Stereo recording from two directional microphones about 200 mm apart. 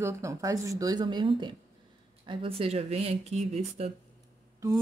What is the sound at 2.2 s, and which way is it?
Speech, 25° right (ahead or behind).